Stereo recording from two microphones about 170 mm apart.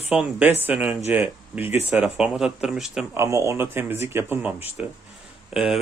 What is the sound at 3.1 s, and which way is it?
Speech, 15° right (ahead or behind).